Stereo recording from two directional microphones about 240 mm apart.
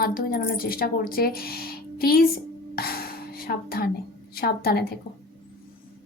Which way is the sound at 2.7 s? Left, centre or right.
Left.